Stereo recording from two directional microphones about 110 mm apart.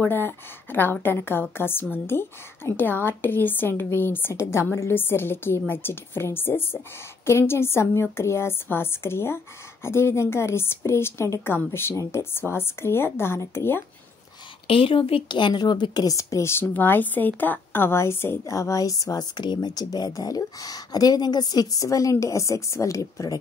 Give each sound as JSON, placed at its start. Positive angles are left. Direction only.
{"t": 0.0, "sound": "a woman's voice", "side_deg": 20}
{"t": 14.7, "sound": "a woman's voice", "side_deg": 55}